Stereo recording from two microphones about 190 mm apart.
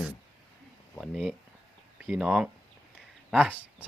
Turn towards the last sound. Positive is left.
turn(degrees=-5)  # may be behind; listen again after turning